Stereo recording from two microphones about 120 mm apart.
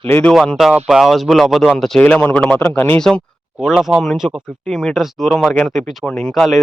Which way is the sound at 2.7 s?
15° left (ahead or behind).